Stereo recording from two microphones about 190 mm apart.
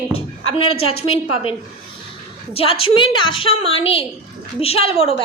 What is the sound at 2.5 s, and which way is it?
A woman's voice, 30° left (ahead or behind).